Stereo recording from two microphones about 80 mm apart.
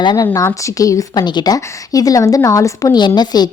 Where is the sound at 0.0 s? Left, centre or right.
Left.